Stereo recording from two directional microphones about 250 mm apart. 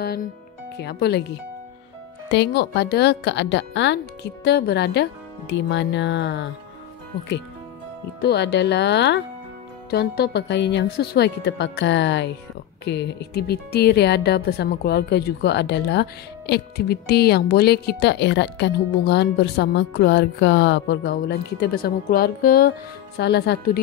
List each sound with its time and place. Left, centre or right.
0.0 s speech: left
2.3 s speech: left
8.2 s speech: left